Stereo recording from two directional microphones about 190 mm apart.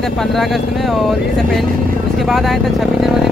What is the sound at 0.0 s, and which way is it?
Speech, centre (ahead or behind).